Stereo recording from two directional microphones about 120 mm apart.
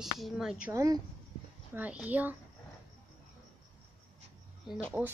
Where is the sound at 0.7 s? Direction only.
25° right (ahead or behind).